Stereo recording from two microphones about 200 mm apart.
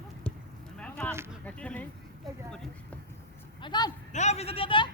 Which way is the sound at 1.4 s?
5° left (ahead or behind).